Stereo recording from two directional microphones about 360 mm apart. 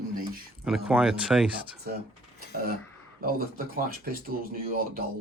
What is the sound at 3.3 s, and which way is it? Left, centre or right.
Speech, right.